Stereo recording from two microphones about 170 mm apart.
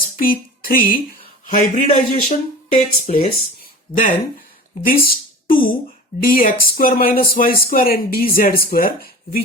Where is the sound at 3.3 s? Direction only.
55° left (ahead or behind).